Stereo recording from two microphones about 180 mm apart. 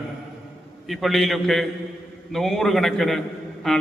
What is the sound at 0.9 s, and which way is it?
A man's voice, centre (ahead or behind).